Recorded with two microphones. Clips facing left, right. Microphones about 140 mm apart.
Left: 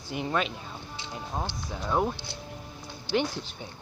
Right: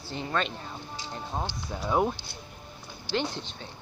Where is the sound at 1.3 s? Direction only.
5° right (ahead or behind).